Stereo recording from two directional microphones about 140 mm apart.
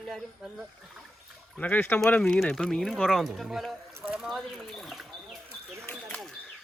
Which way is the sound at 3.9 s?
15° right (ahead or behind).